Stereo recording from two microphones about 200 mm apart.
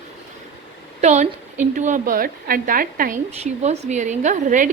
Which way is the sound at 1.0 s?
35° right (ahead or behind).